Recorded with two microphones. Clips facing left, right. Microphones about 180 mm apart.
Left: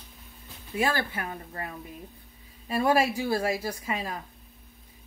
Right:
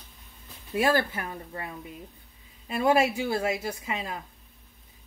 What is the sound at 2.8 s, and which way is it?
Speech, 20° right (ahead or behind).